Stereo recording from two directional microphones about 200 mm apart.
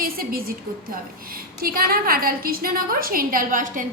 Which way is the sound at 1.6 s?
50° right (ahead or behind).